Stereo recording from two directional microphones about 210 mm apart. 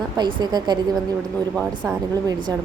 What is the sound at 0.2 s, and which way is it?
Speech, 20° right (ahead or behind).